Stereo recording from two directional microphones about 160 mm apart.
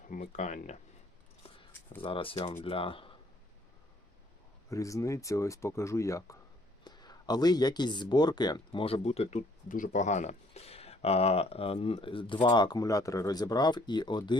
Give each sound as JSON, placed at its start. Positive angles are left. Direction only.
{"t": 0.1, "sound": "speech", "side_deg": 50}
{"t": 2.0, "sound": "speech", "side_deg": 35}
{"t": 4.7, "sound": "speech", "side_deg": 20}
{"t": 9.6, "sound": "speech", "side_deg": 55}